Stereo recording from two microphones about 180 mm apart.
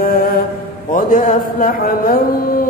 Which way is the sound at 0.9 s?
45° left (ahead or behind).